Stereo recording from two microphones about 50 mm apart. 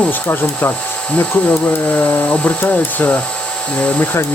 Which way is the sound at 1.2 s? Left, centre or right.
Left.